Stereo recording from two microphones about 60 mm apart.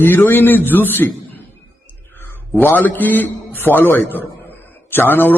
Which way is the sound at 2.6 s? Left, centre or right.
Left.